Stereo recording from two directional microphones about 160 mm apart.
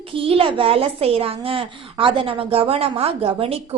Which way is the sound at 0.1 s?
35° right (ahead or behind).